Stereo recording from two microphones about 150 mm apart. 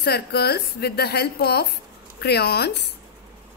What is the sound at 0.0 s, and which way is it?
A woman's voice, 90° left.